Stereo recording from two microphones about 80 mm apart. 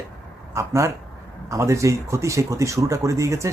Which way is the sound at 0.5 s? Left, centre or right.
Right.